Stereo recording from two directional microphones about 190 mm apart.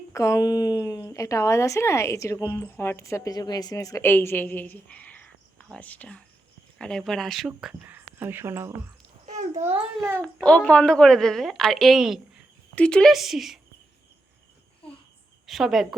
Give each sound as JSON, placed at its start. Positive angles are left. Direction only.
{"t": 0.1, "sound": "a woman's voice", "side_deg": 15}
{"t": 9.2, "sound": "a sound", "side_deg": -40}
{"t": 10.4, "sound": "a woman's voice", "side_deg": 5}
{"t": 15.4, "sound": "a woman's voice", "side_deg": 0}